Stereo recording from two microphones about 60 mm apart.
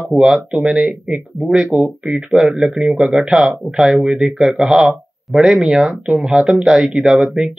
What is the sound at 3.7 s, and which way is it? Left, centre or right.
Speech, centre.